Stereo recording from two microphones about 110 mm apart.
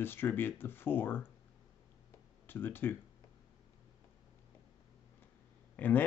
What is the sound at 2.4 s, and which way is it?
Speech, 20° left (ahead or behind).